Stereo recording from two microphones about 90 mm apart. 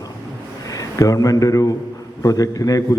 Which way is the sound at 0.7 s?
40° left (ahead or behind).